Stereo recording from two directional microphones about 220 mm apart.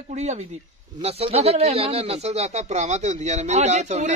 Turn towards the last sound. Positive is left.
turn(degrees=-30)  # may be behind; listen again after turning